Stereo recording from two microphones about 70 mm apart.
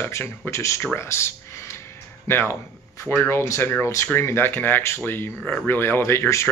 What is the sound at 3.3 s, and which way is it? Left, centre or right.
Speech, left.